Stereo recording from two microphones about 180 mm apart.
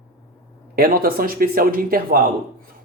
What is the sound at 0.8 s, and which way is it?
Speech, 55° right (ahead or behind).